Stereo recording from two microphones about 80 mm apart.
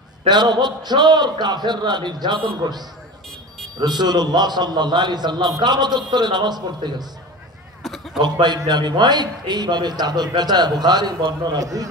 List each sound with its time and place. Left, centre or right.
0.3 s a man's voice: right
3.8 s a man's voice: right
7.8 s a sound: centre
8.2 s a man's voice: right